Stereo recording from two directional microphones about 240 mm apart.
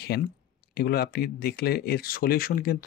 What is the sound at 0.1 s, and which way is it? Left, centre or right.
Speech, left.